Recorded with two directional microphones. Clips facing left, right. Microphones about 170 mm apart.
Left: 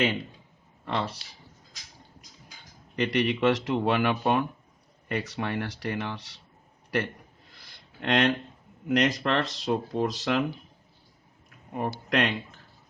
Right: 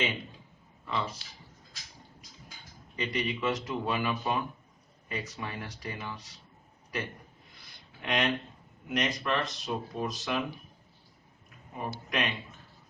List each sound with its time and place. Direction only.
0.9 s speech: 75° left (ahead or behind)
2.9 s speech: 70° left (ahead or behind)
7.5 s a sound: 75° left (ahead or behind)
8.9 s speech: 75° left (ahead or behind)
11.7 s speech: 70° left (ahead or behind)